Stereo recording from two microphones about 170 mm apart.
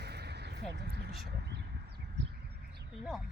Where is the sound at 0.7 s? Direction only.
85° right.